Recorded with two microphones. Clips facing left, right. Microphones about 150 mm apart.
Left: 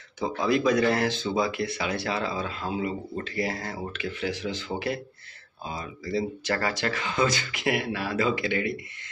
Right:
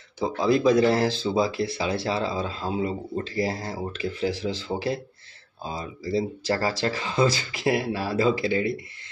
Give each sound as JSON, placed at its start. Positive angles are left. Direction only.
{"t": 0.2, "sound": "speech", "side_deg": -30}